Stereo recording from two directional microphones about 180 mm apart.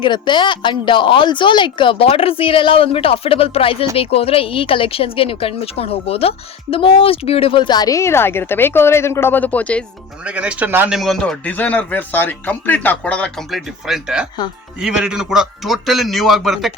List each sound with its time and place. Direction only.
0.0 s a woman's voice: 25° left (ahead or behind); by 9.8 s 10° left (ahead or behind)
10.2 s a man's voice: 5° right (ahead or behind)